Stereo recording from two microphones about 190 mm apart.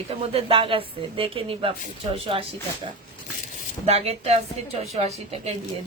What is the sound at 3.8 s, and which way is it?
Speech, 35° right (ahead or behind).